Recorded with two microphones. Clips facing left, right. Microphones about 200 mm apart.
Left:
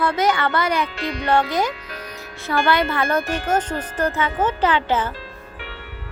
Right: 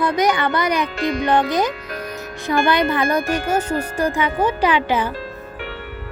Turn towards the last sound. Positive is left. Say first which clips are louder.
# right 2 dB
turn(degrees=-15)  # may be behind; listen again after turning